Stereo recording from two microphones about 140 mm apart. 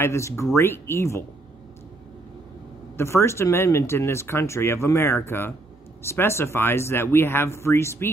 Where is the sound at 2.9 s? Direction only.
20° left (ahead or behind).